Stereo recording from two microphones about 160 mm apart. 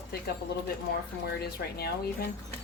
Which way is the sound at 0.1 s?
70° left (ahead or behind).